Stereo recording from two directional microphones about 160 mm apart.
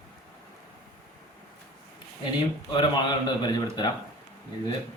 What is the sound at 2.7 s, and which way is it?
A man's voice, 30° left (ahead or behind).